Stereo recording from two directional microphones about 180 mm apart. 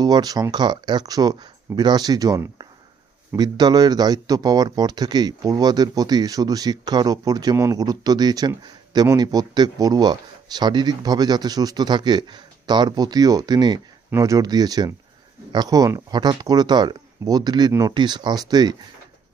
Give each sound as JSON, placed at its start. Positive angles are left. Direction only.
{"t": 0.0, "sound": "speech", "side_deg": -20}